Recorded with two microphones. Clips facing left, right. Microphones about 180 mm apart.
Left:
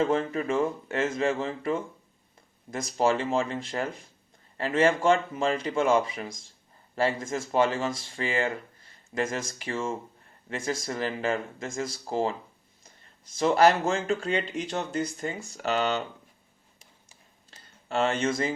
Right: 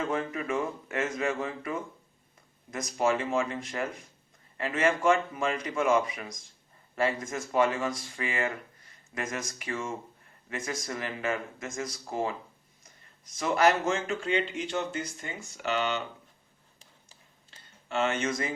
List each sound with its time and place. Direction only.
0.0 s speech: 30° left (ahead or behind)
17.8 s speech: 35° left (ahead or behind)